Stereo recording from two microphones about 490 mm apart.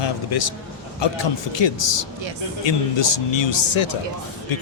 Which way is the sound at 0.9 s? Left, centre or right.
Left.